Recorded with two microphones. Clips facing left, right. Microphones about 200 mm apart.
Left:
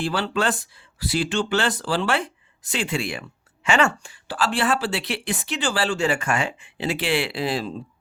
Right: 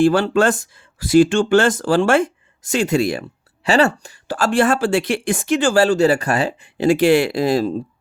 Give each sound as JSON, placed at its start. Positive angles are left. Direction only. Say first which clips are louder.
{"t": 0.0, "sound": "speech", "louder": "right 9 dB", "side_deg": -45}